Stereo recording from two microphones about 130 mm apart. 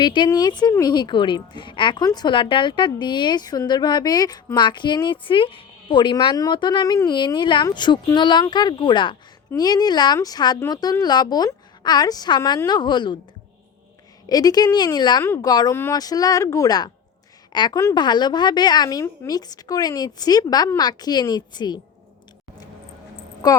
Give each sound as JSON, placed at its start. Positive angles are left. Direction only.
{"t": 0.0, "sound": "a woman's voice", "side_deg": 35}
{"t": 14.3, "sound": "a woman's voice", "side_deg": 30}
{"t": 15.7, "sound": "speech", "side_deg": 20}
{"t": 16.0, "sound": "a woman's voice", "side_deg": 30}
{"t": 23.4, "sound": "speech", "side_deg": 30}